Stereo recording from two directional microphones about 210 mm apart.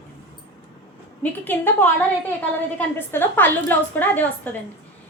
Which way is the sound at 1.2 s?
10° left (ahead or behind).